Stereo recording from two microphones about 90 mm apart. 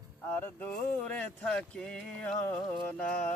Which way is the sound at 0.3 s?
20° left (ahead or behind).